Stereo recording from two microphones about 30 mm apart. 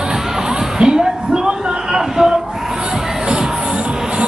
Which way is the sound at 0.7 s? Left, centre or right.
Right.